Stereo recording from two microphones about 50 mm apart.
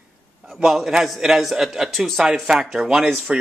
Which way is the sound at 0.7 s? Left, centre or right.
Centre.